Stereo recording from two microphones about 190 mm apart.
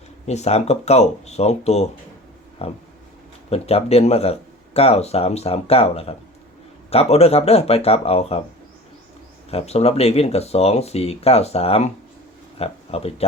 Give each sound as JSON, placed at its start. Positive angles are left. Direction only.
{"t": 0.3, "sound": "speech", "side_deg": 35}
{"t": 9.5, "sound": "speech", "side_deg": 30}